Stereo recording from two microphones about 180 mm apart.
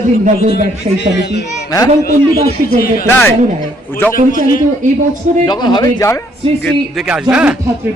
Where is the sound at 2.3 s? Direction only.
55° left (ahead or behind).